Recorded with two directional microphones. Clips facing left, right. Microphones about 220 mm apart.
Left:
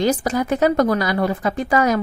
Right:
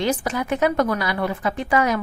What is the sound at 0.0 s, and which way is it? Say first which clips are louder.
A woman's voice: left 4 dB; 40° left (ahead or behind).